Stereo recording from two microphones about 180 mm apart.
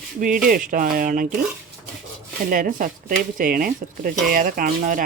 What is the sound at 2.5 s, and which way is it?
Dishes, 50° right (ahead or behind).